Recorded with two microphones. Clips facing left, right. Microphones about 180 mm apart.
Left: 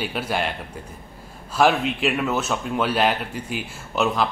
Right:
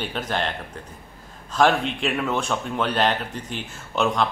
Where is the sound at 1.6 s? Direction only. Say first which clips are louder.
Left 1 dB; 5° left (ahead or behind).